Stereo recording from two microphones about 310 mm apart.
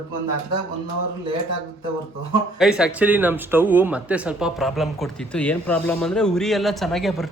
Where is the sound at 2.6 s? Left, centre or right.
Centre.